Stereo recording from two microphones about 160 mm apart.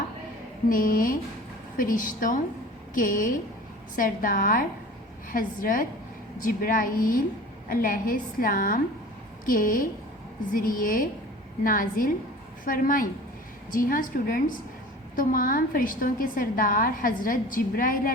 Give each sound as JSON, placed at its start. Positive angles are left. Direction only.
{"t": 0.7, "sound": "a woman's voice", "side_deg": 60}